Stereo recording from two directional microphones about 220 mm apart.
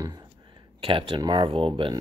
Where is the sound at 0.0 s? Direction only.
15° right (ahead or behind).